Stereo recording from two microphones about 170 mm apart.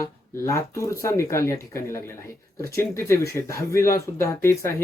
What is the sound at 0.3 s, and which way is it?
Speech, 15° left (ahead or behind).